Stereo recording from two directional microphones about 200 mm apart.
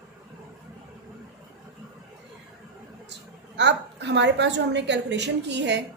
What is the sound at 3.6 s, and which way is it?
Speech, 60° right (ahead or behind).